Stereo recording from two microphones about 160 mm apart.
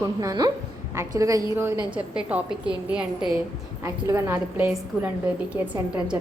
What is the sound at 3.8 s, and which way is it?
A woman's voice, 20° right (ahead or behind).